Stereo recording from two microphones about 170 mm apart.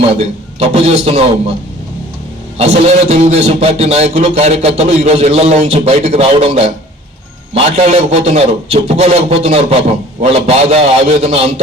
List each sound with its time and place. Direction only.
0.7 s a man's voice: 35° right (ahead or behind)
2.6 s a man's voice: 40° right (ahead or behind)